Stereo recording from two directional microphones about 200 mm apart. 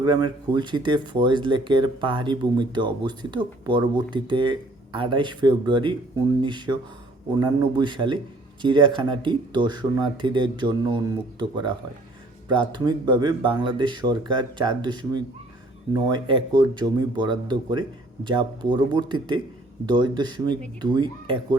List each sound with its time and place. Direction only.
0.0 s speech: 20° right (ahead or behind)